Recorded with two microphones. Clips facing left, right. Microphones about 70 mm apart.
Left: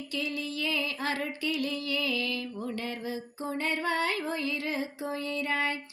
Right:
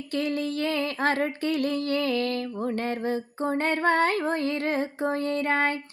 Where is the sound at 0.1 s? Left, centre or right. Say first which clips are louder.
Right 8 dB; right.